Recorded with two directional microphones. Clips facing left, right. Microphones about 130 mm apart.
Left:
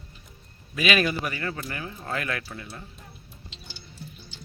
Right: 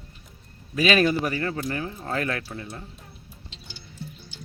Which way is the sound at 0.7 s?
35° right (ahead or behind).